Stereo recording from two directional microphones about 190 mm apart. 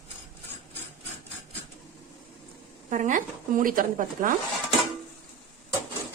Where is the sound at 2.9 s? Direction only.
40° right (ahead or behind).